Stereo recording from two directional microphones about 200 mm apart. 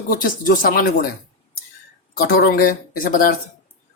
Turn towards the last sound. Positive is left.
turn(degrees=45)  # may be behind; listen again after turning